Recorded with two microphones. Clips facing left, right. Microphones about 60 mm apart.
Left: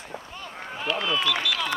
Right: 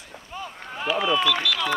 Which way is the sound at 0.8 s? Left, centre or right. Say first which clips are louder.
Right 4 dB; centre.